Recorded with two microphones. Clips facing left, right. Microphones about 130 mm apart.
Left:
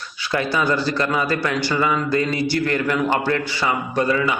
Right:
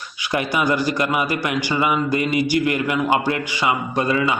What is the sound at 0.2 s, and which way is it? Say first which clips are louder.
A man's voice: even; 15° right (ahead or behind).